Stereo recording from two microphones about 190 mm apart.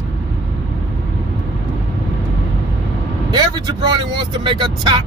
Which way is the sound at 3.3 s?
25° right (ahead or behind).